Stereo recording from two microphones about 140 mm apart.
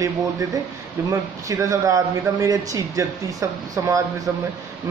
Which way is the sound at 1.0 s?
25° right (ahead or behind).